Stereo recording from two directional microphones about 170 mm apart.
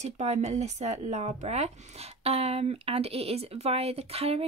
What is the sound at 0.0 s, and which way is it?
Speech, 40° right (ahead or behind).